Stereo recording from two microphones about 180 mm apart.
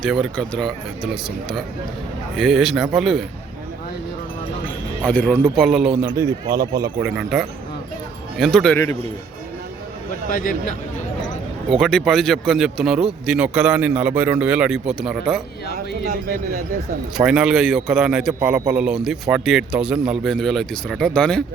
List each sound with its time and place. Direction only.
0.0 s speech: centre (ahead or behind)
5.0 s speech: 5° left (ahead or behind); by 6.2 s 10° right (ahead or behind)
6.5 s speech: 20° right (ahead or behind)
7.1 s speech: 5° right (ahead or behind)
11.7 s speech: centre (ahead or behind)
16.0 s speech: 50° right (ahead or behind)
17.2 s speech: 5° right (ahead or behind)